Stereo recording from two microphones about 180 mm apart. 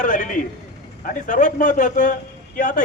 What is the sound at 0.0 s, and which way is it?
A man's voice, 45° left (ahead or behind).